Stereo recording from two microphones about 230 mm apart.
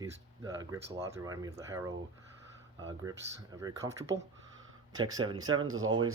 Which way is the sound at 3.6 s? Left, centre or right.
Centre.